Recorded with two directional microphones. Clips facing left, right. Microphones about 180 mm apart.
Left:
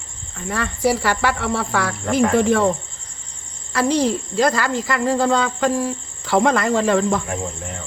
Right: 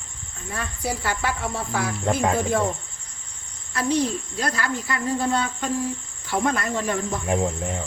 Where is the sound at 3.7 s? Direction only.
90° left.